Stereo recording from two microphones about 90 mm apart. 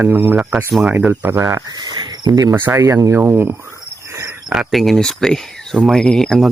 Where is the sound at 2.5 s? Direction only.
30° right (ahead or behind).